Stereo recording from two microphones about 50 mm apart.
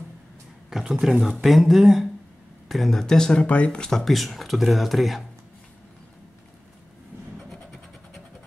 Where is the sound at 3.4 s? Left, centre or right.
Left.